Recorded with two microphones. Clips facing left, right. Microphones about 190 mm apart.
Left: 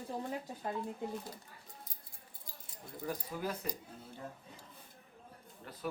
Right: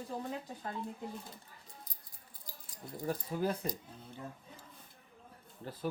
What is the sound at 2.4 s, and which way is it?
Keys jangling, 25° left (ahead or behind).